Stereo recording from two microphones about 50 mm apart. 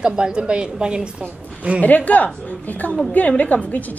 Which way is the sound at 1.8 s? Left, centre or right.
Left.